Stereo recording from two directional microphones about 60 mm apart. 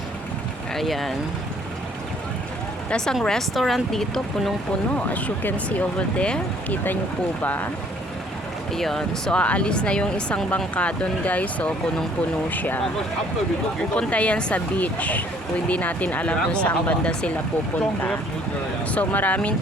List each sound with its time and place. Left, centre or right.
0.7 s speech: centre
2.9 s speech: centre
4.9 s speech: left
7.4 s speech: left
8.7 s speech: centre
9.4 s speech: left
14.1 s speech: left
18.9 s speech: left